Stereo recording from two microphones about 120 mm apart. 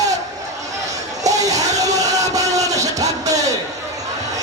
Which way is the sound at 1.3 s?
30° right (ahead or behind).